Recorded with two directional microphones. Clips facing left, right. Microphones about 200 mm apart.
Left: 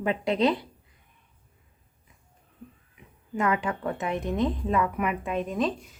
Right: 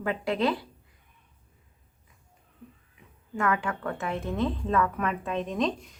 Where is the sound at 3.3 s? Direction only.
20° left (ahead or behind).